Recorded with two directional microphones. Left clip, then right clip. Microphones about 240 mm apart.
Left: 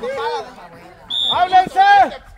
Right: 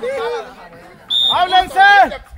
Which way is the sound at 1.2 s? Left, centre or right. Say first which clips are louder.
Left 1 dB; right.